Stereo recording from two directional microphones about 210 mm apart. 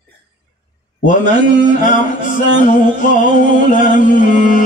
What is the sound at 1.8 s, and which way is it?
Music, 40° left (ahead or behind).